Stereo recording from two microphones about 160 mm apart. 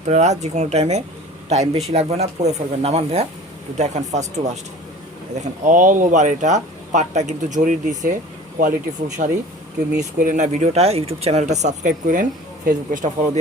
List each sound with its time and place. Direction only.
0.0 s speech: 45° right (ahead or behind)